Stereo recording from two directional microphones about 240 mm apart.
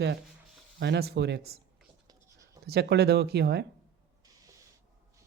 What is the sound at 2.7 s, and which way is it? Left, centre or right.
Speech, right.